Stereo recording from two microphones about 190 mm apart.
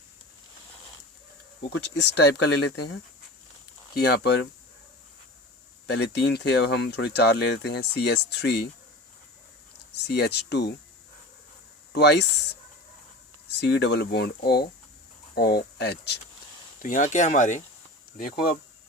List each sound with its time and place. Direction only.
1.7 s speech: 65° left (ahead or behind)
5.9 s speech: 60° left (ahead or behind)
10.1 s speech: 60° left (ahead or behind)
11.9 s speech: 60° left (ahead or behind)
13.6 s speech: 60° left (ahead or behind)
16.8 s speech: 40° left (ahead or behind)
18.2 s speech: 55° left (ahead or behind)